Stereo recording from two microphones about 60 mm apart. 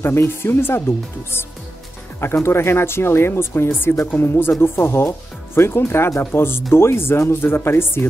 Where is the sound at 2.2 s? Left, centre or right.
Left.